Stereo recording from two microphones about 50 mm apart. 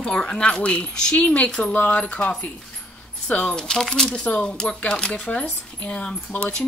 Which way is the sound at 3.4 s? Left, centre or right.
Centre.